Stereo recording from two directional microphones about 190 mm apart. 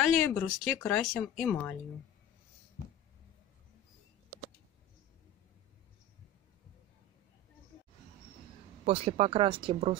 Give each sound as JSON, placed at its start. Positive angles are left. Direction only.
{"t": 0.1, "sound": "speech", "side_deg": 5}
{"t": 8.8, "sound": "speech", "side_deg": -30}